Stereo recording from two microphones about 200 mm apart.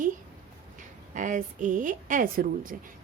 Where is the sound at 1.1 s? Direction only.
40° right (ahead or behind).